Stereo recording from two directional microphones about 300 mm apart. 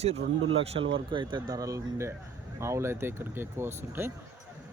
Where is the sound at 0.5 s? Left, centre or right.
Centre.